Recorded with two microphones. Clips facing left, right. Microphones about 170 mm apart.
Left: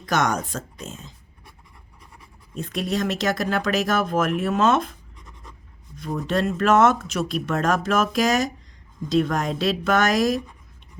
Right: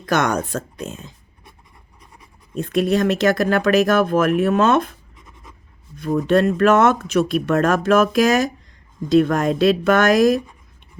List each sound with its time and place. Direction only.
0.0 s speech: 60° right (ahead or behind)
2.6 s speech: 55° right (ahead or behind)
5.1 s writing: centre (ahead or behind)
6.0 s speech: 55° right (ahead or behind)